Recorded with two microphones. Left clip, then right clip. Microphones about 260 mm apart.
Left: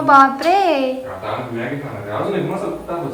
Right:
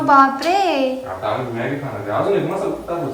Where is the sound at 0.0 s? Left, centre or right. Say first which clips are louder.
Left 2 dB; centre.